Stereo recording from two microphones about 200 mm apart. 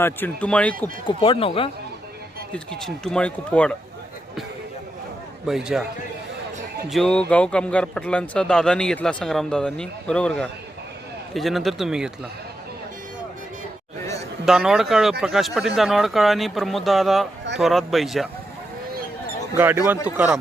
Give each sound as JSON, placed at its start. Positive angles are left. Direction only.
{"t": 0.0, "sound": "speech", "side_deg": 10}
{"t": 1.0, "sound": "speech", "side_deg": 25}
{"t": 2.5, "sound": "a man's voice", "side_deg": 5}
{"t": 5.5, "sound": "a man's voice", "side_deg": 0}
{"t": 6.9, "sound": "a man's voice", "side_deg": 5}
{"t": 14.4, "sound": "a man's voice", "side_deg": -5}
{"t": 19.5, "sound": "speech", "side_deg": -10}